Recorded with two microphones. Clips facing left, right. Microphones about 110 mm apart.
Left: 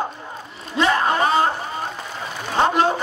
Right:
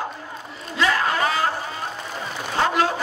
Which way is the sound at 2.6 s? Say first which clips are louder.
Left 3 dB; 25° left (ahead or behind).